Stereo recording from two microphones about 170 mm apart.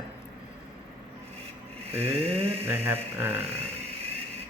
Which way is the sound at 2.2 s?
35° right (ahead or behind).